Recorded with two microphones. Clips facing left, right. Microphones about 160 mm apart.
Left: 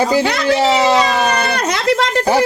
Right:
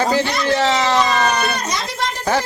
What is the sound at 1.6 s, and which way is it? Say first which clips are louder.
Speech: left 8 dB; 65° left (ahead or behind).